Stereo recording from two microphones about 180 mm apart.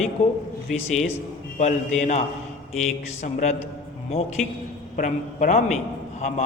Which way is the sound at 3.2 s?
40° left (ahead or behind).